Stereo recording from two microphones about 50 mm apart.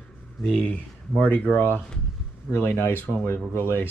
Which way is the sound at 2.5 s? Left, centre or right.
Left.